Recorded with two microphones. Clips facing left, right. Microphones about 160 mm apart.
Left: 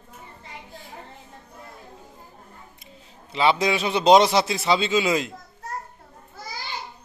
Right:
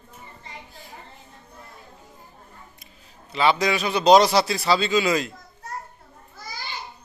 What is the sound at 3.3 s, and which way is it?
A man's voice, 25° left (ahead or behind).